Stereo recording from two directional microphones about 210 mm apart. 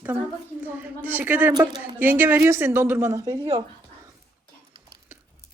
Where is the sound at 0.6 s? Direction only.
10° right (ahead or behind).